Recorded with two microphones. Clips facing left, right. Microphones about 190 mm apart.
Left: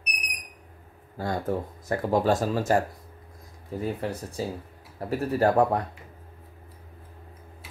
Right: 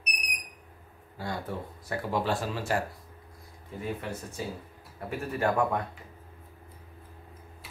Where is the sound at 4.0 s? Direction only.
35° left (ahead or behind).